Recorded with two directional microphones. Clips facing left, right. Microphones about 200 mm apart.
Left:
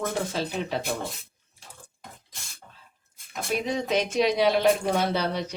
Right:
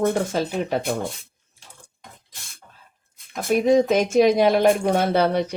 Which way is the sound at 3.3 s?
50° right (ahead or behind).